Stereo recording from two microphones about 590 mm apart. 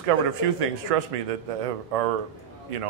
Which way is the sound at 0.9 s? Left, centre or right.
Right.